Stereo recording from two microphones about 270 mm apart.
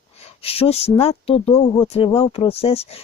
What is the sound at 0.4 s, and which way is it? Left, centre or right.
Speech, left.